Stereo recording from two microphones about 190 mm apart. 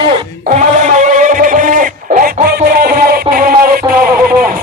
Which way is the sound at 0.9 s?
40° right (ahead or behind).